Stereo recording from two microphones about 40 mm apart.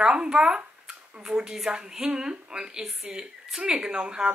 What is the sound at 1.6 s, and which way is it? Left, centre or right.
Speech, right.